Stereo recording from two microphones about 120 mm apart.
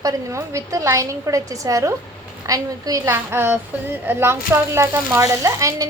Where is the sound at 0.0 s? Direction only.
25° right (ahead or behind).